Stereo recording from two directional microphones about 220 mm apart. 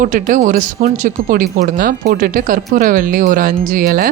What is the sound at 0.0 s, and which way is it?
Speech, 35° right (ahead or behind).